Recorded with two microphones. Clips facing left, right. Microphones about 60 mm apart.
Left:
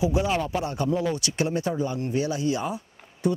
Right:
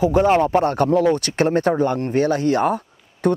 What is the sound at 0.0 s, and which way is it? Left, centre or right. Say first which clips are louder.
Speech: right 9 dB; right.